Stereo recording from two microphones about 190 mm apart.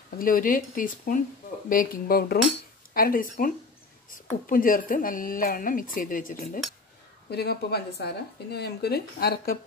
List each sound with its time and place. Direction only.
0.2 s a woman's voice: 45° left (ahead or behind)
7.2 s speech: 55° left (ahead or behind)